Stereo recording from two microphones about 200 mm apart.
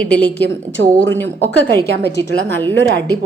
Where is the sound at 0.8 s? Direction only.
75° right (ahead or behind).